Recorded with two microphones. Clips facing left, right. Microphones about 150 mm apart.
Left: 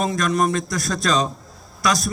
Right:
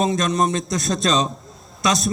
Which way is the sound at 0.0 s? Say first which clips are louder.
Right 1 dB; 20° right (ahead or behind).